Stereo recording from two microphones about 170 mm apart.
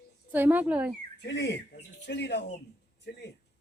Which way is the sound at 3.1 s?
75° left (ahead or behind).